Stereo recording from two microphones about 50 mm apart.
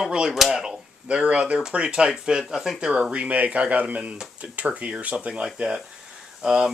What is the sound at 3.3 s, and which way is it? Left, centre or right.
Speech, right.